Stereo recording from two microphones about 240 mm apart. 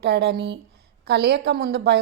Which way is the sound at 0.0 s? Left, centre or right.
Right.